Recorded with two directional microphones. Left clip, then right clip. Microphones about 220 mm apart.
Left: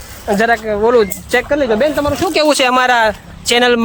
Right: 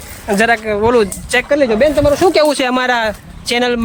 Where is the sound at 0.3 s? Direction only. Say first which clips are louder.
Even; 5° right (ahead or behind).